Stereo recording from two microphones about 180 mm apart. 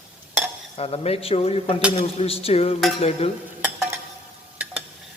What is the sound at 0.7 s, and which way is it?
A man's voice, 35° left (ahead or behind).